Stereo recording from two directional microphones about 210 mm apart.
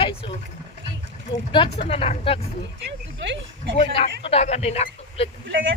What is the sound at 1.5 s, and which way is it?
Speech, 25° left (ahead or behind).